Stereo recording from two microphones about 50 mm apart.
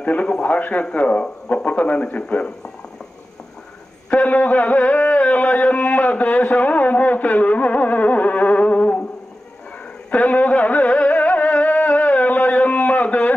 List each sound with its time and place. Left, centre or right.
0.0 s a man's voice: left
4.1 s a sound: left
10.1 s music: left